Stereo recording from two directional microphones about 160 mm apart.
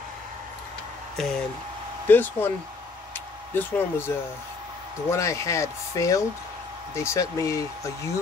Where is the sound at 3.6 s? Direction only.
15° left (ahead or behind).